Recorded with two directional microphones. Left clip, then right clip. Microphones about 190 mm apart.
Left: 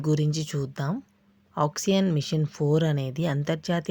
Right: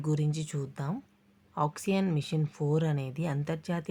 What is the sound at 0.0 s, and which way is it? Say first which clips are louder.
Speech: left 7 dB; 25° left (ahead or behind).